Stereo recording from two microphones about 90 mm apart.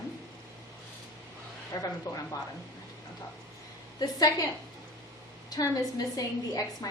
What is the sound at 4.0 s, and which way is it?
Speech, 50° left (ahead or behind).